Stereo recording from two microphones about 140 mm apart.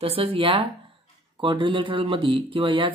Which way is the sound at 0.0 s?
45° right (ahead or behind).